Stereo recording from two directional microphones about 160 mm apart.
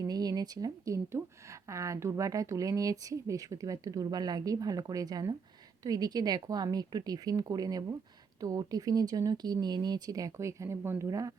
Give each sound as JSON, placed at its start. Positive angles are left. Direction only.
{"t": 0.1, "sound": "speech", "side_deg": -25}